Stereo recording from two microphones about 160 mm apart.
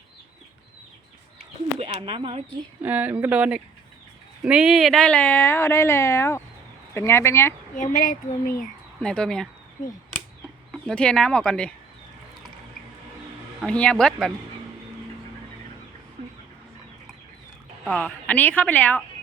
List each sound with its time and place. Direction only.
1.8 s speech: 35° right (ahead or behind)
2.8 s speech: 10° right (ahead or behind); by 7.5 s 15° left (ahead or behind)
7.8 s speech: 55° left (ahead or behind)
9.0 s speech: 5° left (ahead or behind)
10.7 s speech: 5° left (ahead or behind)
13.6 s speech: 5° left (ahead or behind)
17.8 s speech: 10° left (ahead or behind)